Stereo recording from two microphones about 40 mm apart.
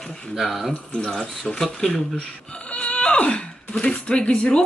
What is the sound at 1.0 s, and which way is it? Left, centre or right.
Speech, centre.